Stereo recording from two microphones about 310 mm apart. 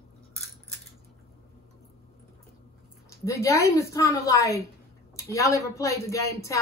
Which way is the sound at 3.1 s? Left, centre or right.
Centre.